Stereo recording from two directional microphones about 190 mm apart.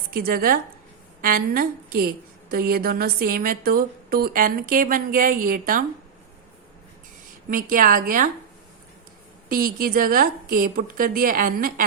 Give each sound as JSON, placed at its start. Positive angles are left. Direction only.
{"t": 0.1, "sound": "a woman's voice", "side_deg": -50}
{"t": 7.5, "sound": "a woman's voice", "side_deg": -45}
{"t": 9.5, "sound": "a woman's voice", "side_deg": -50}